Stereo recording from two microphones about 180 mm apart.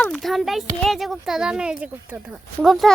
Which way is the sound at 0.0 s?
Centre (ahead or behind).